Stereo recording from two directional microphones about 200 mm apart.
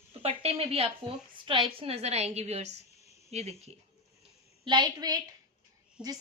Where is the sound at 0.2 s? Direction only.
30° right (ahead or behind).